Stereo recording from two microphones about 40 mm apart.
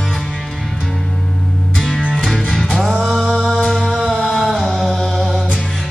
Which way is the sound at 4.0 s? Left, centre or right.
Centre.